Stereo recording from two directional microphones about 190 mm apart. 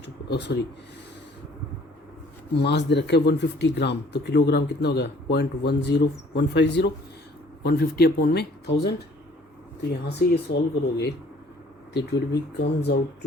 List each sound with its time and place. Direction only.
0.0 s speech: 65° left (ahead or behind)
2.6 s speech: 65° left (ahead or behind)